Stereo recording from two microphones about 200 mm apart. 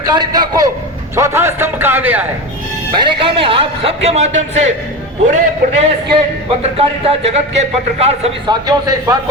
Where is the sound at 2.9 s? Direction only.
25° right (ahead or behind).